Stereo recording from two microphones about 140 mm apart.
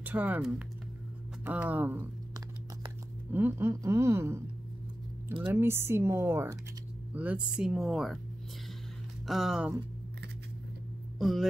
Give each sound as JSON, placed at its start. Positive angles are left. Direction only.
{"t": 0.0, "sound": "speech", "side_deg": -10}
{"t": 3.3, "sound": "speech", "side_deg": -15}
{"t": 5.4, "sound": "speech", "side_deg": -15}
{"t": 9.2, "sound": "speech", "side_deg": 0}
{"t": 11.1, "sound": "speech", "side_deg": 0}